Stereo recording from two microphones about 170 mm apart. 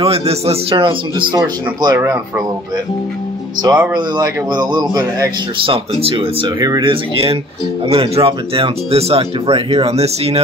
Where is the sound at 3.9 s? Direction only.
25° right (ahead or behind).